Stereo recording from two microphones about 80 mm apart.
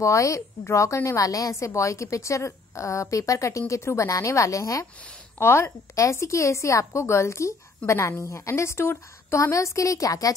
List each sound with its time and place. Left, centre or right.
0.0 s a woman's voice: left